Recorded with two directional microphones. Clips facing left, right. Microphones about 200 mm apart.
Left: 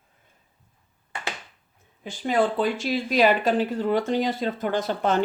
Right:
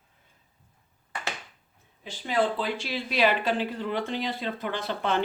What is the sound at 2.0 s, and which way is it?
Speech, 50° left (ahead or behind).